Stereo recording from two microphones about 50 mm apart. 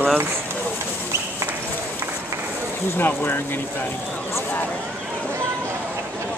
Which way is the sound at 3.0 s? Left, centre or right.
Left.